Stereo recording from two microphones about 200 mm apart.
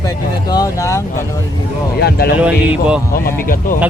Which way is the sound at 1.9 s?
50° left (ahead or behind).